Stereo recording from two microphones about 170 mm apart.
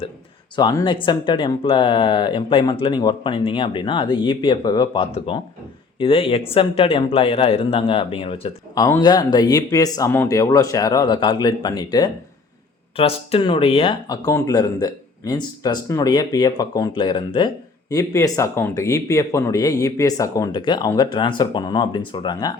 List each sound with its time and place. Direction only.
0.5 s speech: 25° left (ahead or behind)
8.7 s speech: 20° left (ahead or behind)
13.0 s speech: 35° left (ahead or behind)
14.3 s speech: 20° left (ahead or behind)